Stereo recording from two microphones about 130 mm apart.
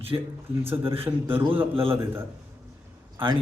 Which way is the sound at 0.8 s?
45° right (ahead or behind).